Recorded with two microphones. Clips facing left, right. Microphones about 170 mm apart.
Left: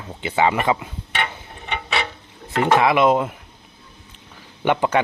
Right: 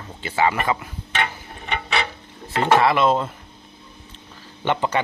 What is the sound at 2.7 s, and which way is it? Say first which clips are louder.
Speech: left 2 dB; 15° left (ahead or behind).